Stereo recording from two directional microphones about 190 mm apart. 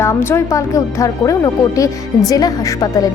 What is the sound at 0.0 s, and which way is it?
Speech, 15° left (ahead or behind).